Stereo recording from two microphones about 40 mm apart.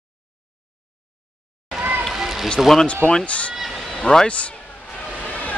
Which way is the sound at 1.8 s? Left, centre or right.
Right.